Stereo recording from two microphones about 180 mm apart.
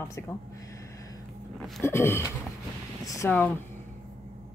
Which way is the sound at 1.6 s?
Centre (ahead or behind).